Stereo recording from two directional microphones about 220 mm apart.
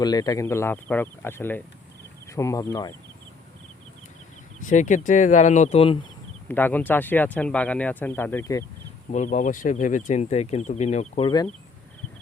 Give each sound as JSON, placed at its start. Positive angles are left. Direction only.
{"t": 0.0, "sound": "speech", "side_deg": 15}
{"t": 4.6, "sound": "speech", "side_deg": 35}
{"t": 6.5, "sound": "speech", "side_deg": 10}
{"t": 9.1, "sound": "speech", "side_deg": 35}